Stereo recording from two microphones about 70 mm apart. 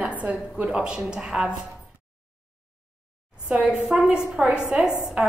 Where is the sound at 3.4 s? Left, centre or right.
Centre.